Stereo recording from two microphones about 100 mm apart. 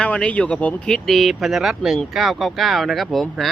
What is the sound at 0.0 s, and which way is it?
Speech, 15° left (ahead or behind).